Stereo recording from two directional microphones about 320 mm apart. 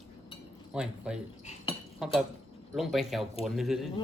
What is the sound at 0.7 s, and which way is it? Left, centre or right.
Speech, centre.